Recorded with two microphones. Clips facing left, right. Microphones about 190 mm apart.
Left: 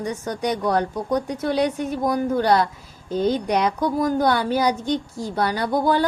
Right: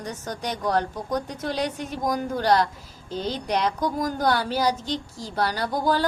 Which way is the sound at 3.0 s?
55° left (ahead or behind).